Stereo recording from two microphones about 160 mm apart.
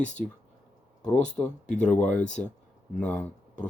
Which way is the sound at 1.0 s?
5° left (ahead or behind).